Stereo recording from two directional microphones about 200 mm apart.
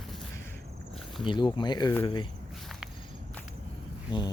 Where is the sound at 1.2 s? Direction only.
25° left (ahead or behind).